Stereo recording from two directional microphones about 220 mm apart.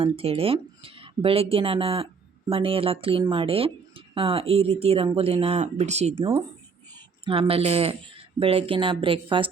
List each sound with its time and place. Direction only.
0.0 s speech: 25° right (ahead or behind)